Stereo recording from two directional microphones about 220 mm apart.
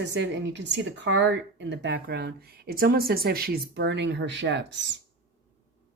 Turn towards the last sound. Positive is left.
turn(degrees=-50)  # may be behind; listen again after turning